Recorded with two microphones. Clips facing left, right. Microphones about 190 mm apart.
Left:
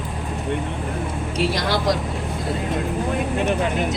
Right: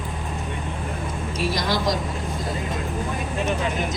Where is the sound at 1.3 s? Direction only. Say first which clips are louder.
Left 2 dB; 65° left (ahead or behind).